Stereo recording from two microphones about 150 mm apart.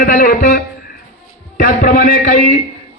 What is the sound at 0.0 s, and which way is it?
A man's voice, 75° left (ahead or behind).